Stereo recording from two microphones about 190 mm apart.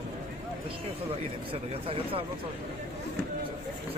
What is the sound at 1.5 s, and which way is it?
Speech, 30° right (ahead or behind).